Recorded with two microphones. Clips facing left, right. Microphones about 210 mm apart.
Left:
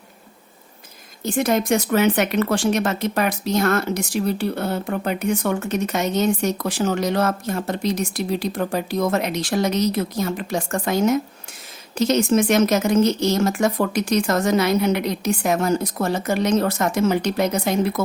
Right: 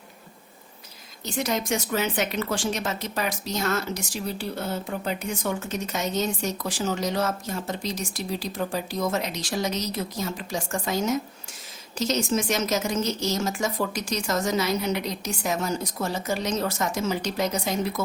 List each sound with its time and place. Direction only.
1.2 s speech: 55° left (ahead or behind)